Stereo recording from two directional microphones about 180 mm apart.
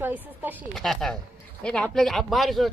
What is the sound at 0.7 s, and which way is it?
Speech, centre (ahead or behind).